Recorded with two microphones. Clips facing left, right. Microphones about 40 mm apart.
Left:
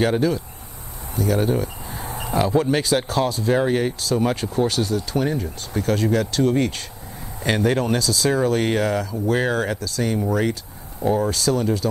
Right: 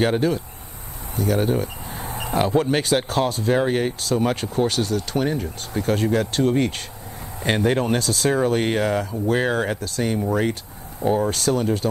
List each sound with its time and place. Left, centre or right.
0.0 s speech: right
5.8 s speech: right
8.3 s speech: right